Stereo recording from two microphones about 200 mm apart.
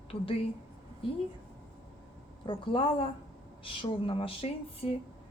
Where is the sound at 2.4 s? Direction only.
25° left (ahead or behind).